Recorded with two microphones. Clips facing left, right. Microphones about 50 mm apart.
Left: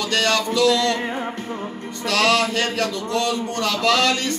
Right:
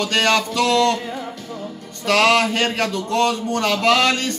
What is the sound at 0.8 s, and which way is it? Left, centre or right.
Music, left.